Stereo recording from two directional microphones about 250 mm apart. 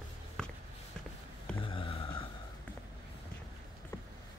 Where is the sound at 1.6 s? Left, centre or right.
Left.